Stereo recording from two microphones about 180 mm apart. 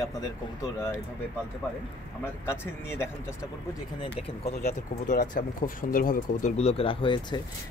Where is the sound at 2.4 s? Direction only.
15° left (ahead or behind).